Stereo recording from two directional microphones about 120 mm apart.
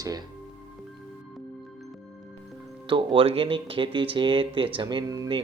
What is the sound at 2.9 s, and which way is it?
Speech, 45° right (ahead or behind).